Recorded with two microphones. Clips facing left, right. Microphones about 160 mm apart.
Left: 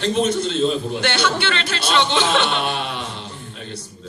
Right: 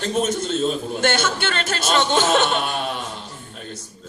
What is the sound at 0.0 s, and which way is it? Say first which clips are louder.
A man's voice: left 3 dB; 45° right (ahead or behind).